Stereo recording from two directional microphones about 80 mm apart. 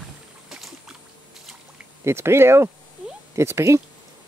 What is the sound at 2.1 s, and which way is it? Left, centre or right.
Speech, right.